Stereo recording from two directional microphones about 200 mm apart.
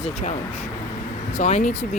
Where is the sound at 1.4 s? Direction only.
35° left (ahead or behind).